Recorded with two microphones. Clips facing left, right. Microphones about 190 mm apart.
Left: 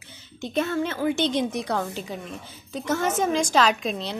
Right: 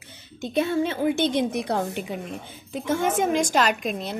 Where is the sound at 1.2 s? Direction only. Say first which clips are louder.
Right 1 dB; 55° right (ahead or behind).